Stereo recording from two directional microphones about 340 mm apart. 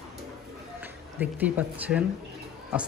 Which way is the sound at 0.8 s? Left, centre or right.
Centre.